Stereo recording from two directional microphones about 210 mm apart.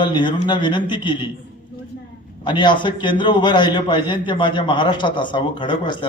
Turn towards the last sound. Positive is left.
turn(degrees=20)  # may be behind; listen again after turning